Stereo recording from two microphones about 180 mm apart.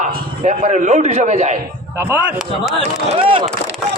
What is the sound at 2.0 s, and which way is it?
Speech, 15° right (ahead or behind).